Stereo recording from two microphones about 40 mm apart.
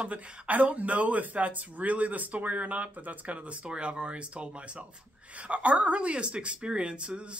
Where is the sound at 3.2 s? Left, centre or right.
Right.